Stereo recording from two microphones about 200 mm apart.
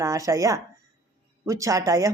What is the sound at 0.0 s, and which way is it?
Speech, 15° right (ahead or behind).